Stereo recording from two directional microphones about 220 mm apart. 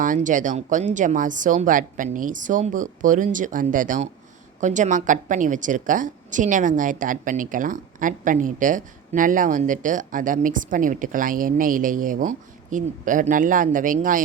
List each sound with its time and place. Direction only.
0.0 s a woman's voice: 35° right (ahead or behind)